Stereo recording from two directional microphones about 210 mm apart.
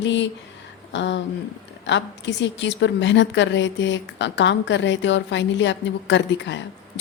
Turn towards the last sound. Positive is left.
turn(degrees=60)  # may be behind; listen again after turning